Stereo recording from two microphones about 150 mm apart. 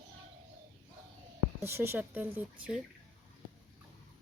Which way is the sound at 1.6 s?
15° right (ahead or behind).